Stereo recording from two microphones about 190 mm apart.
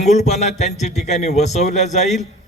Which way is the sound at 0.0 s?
35° left (ahead or behind).